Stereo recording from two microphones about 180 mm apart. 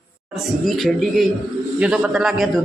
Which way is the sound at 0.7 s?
Centre (ahead or behind).